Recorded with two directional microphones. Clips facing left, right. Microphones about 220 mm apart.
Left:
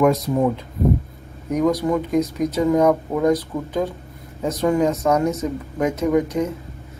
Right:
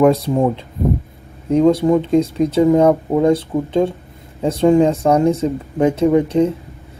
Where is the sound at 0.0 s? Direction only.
30° right (ahead or behind).